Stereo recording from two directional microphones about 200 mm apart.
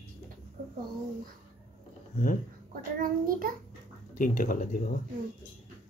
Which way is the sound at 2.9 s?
45° right (ahead or behind).